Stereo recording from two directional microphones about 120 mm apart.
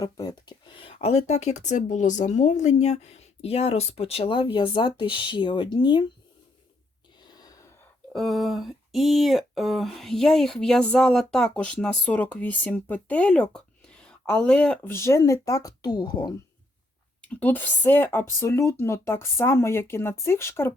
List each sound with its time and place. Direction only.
0.0 s speech: 35° left (ahead or behind)
0.8 s speech: 55° left (ahead or behind); by 6.1 s 40° left (ahead or behind)
7.3 s gasp: 35° left (ahead or behind)
8.1 s speech: centre (ahead or behind)
14.9 s speech: 25° left (ahead or behind); by 16.3 s 40° left (ahead or behind)
17.2 s speech: 15° left (ahead or behind)